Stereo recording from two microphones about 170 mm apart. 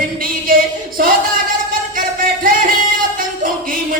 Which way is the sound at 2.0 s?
55° right (ahead or behind).